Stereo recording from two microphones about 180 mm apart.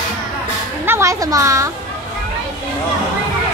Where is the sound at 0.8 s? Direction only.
15° right (ahead or behind).